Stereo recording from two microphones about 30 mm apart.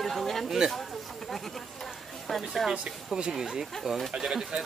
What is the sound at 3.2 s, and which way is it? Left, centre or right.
Speech, right.